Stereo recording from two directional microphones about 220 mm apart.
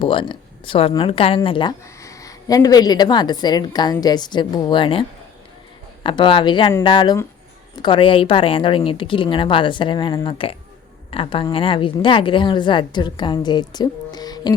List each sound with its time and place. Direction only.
0.0 s speech: 20° left (ahead or behind)